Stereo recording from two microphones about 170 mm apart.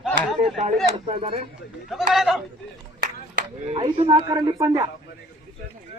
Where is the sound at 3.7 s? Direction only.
35° right (ahead or behind).